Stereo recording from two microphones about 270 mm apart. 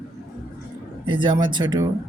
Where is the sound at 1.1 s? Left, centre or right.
Centre.